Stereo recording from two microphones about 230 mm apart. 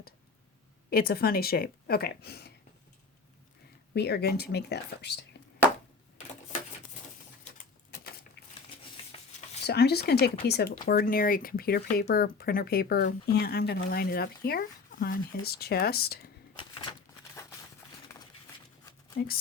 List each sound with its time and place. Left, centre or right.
0.9 s speech: left
3.9 s speech: left
8.4 s a sound: left
9.6 s speech: left
19.1 s speech: left